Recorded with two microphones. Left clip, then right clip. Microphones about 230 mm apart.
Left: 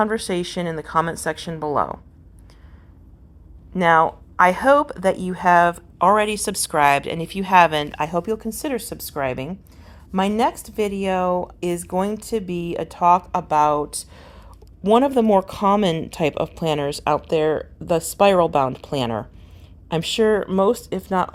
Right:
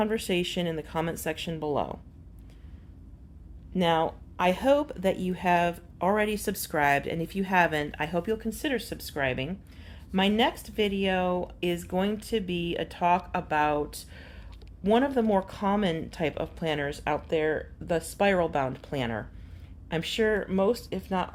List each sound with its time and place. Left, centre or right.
0.6 s a woman's voice: centre
1.5 s speech: left
3.8 s speech: centre; by 21.2 s left